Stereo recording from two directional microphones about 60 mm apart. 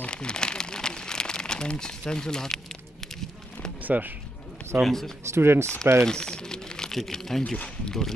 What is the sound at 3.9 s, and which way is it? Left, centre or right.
Speech, right.